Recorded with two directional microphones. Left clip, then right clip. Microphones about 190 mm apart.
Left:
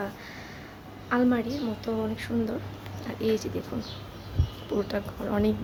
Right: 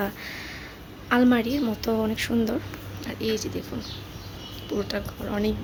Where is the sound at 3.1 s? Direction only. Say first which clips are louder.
Even; 5° left (ahead or behind).